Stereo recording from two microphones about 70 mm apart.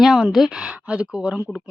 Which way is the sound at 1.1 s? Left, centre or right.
Centre.